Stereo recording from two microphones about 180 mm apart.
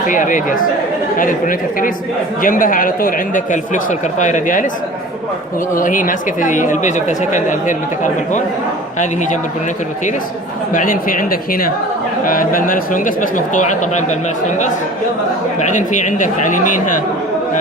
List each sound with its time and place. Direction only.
0.1 s speech: 45° left (ahead or behind)
5.7 s speech: 45° left (ahead or behind)
10.7 s speech: 50° left (ahead or behind)
15.5 s speech: 45° left (ahead or behind)